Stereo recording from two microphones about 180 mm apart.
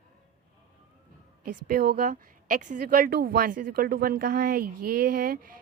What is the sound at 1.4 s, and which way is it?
A woman's voice, 55° right (ahead or behind).